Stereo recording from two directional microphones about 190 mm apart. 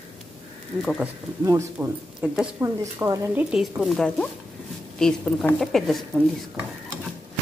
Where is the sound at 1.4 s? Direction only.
15° right (ahead or behind).